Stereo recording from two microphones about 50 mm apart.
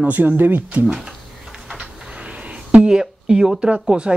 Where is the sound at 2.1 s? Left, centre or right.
Right.